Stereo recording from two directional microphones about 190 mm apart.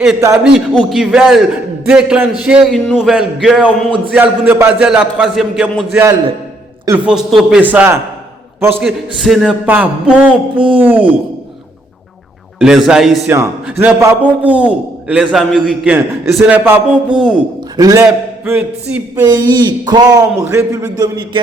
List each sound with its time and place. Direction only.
0.4 s a man's voice: centre (ahead or behind)
12.5 s a man's voice: centre (ahead or behind)
13.2 s a man's voice: 10° right (ahead or behind)
19.2 s a man's voice: 20° right (ahead or behind)